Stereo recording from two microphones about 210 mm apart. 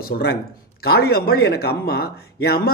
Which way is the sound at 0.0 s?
50° left (ahead or behind).